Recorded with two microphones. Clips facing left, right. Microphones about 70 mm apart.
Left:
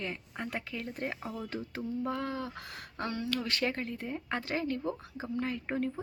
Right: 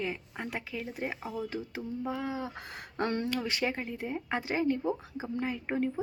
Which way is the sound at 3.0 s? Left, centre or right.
Right.